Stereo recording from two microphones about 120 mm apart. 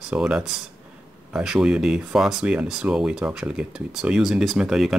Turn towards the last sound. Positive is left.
turn(degrees=-5)  # may be behind; listen again after turning